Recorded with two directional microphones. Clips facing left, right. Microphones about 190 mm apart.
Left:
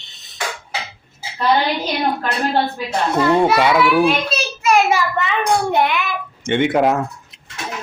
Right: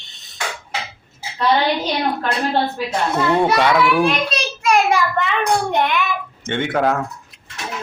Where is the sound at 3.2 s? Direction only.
5° left (ahead or behind).